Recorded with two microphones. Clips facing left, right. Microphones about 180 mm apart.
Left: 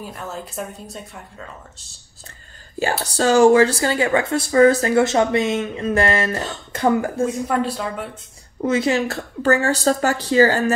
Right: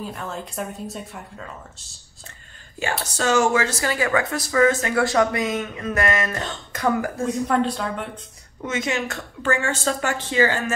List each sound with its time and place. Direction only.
0.1 s speech: centre (ahead or behind)
3.0 s speech: 35° left (ahead or behind)
4.9 s speech: 25° left (ahead or behind)
7.4 s speech: 5° left (ahead or behind)
8.6 s speech: 35° left (ahead or behind)